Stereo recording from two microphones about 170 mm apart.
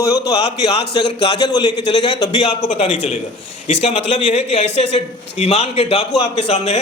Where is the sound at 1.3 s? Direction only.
25° left (ahead or behind).